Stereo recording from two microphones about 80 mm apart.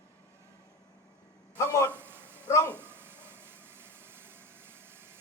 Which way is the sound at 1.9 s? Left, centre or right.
Right.